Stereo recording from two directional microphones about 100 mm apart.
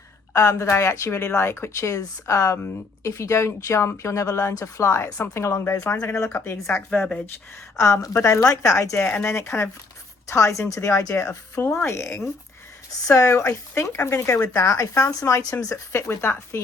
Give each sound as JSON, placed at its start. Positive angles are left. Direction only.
{"t": 0.3, "sound": "speech", "side_deg": 30}